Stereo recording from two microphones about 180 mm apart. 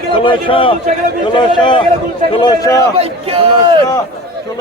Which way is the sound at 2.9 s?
35° right (ahead or behind).